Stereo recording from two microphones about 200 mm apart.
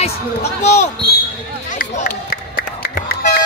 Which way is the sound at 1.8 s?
45° left (ahead or behind).